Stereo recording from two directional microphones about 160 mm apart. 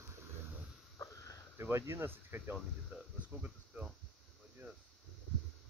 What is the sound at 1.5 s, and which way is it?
Speech, 15° right (ahead or behind).